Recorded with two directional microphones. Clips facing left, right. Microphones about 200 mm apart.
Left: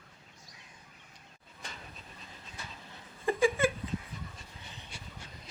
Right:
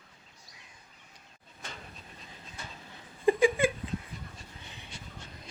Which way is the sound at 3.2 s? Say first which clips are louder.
Right 3 dB; 15° right (ahead or behind).